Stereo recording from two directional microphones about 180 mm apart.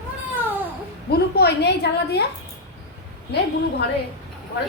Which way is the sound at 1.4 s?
65° left (ahead or behind).